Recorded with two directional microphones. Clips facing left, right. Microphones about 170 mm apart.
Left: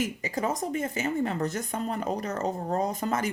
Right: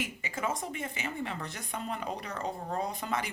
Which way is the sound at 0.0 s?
40° left (ahead or behind).